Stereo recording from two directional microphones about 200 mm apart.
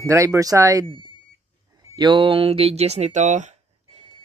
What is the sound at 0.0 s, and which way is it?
Speech, 15° right (ahead or behind).